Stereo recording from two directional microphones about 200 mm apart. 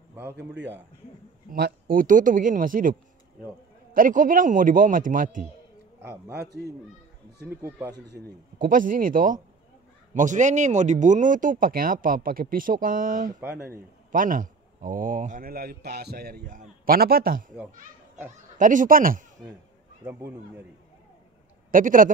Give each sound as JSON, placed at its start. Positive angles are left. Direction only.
{"t": 0.1, "sound": "speech", "side_deg": -10}
{"t": 1.5, "sound": "a man's voice", "side_deg": -45}
{"t": 6.3, "sound": "speech", "side_deg": -55}
{"t": 7.4, "sound": "speech", "side_deg": -10}
{"t": 8.1, "sound": "a man's voice", "side_deg": -45}
{"t": 13.4, "sound": "speech", "side_deg": -10}
{"t": 13.7, "sound": "a man's voice", "side_deg": -45}
{"t": 18.6, "sound": "a man's voice", "side_deg": -40}
{"t": 20.1, "sound": "speech", "side_deg": -10}
{"t": 21.6, "sound": "speech", "side_deg": -45}